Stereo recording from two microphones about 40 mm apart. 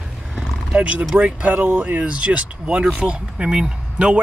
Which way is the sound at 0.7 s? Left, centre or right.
Right.